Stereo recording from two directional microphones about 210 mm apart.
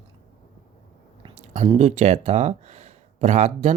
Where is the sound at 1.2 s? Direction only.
30° right (ahead or behind).